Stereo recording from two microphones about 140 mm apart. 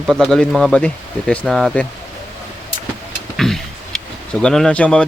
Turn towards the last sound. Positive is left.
turn(degrees=10)  # may be behind; listen again after turning